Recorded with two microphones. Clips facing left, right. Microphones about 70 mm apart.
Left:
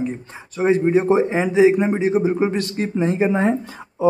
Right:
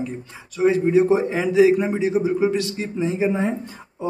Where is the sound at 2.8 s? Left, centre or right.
Left.